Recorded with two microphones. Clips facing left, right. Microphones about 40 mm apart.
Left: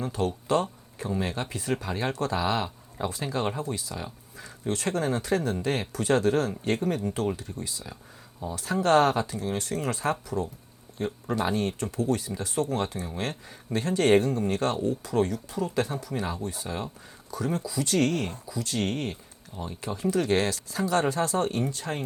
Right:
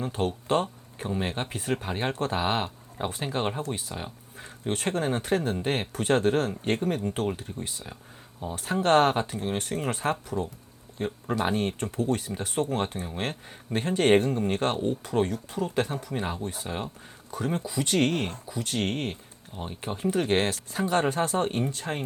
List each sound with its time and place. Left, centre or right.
0.1 s speech: right
7.3 s speech: right